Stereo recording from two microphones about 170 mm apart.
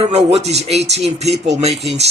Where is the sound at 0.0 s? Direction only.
40° right (ahead or behind).